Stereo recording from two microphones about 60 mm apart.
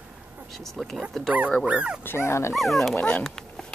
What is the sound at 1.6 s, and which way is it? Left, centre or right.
Speech, centre.